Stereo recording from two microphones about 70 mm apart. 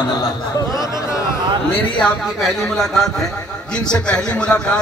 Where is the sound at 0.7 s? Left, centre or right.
Left.